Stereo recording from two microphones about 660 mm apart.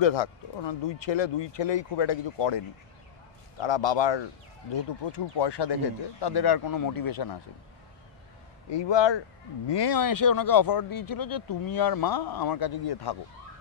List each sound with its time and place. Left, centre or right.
0.0 s speech: left
8.6 s speech: left